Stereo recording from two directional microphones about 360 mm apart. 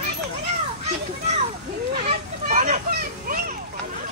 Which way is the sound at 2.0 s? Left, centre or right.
Centre.